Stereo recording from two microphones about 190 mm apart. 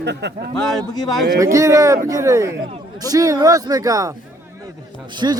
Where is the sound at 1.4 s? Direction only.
15° right (ahead or behind).